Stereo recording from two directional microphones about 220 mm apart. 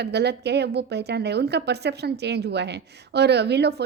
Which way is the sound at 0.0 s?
50° right (ahead or behind).